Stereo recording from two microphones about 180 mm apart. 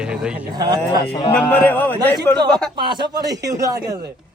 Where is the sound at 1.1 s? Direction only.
25° left (ahead or behind).